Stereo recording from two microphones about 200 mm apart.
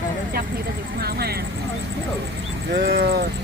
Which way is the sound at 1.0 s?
50° right (ahead or behind).